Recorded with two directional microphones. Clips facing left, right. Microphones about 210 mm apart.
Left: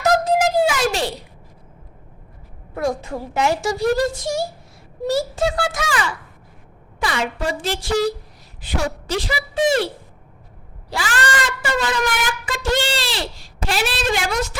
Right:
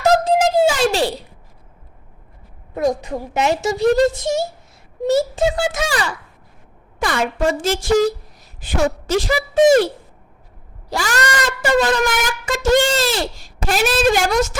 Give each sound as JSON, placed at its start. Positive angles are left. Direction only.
{"t": 0.0, "sound": "a sound", "side_deg": -30}
{"t": 2.7, "sound": "a woman's voice", "side_deg": -20}
{"t": 5.9, "sound": "speech", "side_deg": -35}
{"t": 7.0, "sound": "a woman's voice", "side_deg": -50}